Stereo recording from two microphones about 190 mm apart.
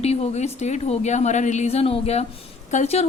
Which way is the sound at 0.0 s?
35° left (ahead or behind).